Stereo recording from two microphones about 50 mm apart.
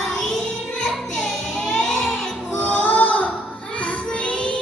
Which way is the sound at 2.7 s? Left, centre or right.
Left.